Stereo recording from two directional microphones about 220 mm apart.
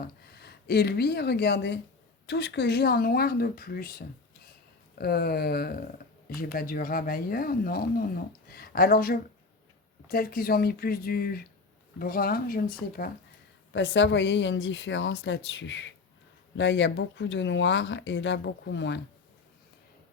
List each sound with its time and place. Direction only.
0.0 s speech: 45° left (ahead or behind)
13.7 s speech: 55° left (ahead or behind)